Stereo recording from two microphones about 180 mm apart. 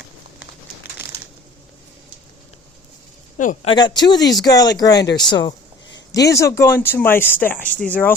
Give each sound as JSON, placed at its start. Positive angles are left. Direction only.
{"t": 3.3, "sound": "speech", "side_deg": 45}
{"t": 3.7, "sound": "speech", "side_deg": 25}